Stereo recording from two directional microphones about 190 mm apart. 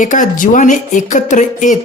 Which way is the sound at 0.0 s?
45° left (ahead or behind).